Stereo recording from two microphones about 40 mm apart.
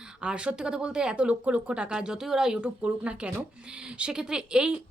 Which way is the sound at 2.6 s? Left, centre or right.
Right.